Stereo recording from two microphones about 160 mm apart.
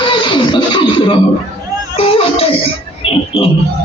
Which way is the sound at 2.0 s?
35° left (ahead or behind).